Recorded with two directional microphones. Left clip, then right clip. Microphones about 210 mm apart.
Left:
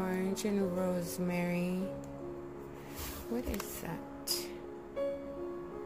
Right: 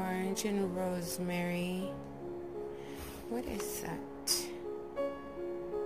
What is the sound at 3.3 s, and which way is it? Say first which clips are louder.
Speech: right 1 dB; centre (ahead or behind).